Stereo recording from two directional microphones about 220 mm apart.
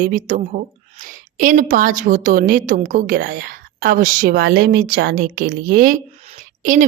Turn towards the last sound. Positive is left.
turn(degrees=-35)  # may be behind; listen again after turning